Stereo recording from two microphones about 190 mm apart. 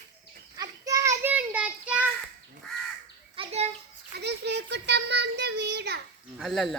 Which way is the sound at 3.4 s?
35° right (ahead or behind).